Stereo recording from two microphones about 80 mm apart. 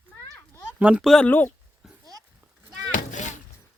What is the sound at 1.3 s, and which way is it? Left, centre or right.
Speech, left.